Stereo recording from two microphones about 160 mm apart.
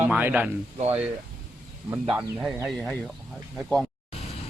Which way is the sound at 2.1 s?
5° right (ahead or behind).